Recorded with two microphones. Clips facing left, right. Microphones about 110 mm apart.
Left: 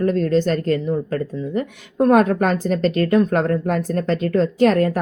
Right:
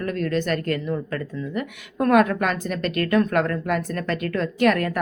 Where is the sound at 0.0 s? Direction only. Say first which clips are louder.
Left 7 dB; 30° left (ahead or behind).